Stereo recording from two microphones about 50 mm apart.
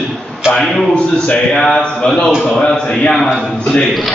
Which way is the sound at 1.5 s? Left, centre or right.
Centre.